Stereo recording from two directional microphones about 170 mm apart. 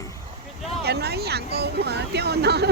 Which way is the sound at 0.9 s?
70° right (ahead or behind).